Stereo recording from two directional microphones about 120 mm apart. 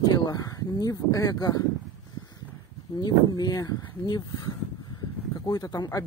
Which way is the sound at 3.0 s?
35° left (ahead or behind).